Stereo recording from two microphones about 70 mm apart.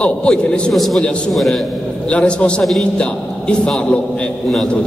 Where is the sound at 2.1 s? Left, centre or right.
Centre.